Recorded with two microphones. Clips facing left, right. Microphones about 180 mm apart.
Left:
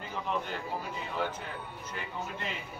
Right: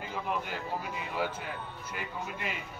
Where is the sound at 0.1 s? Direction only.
10° right (ahead or behind).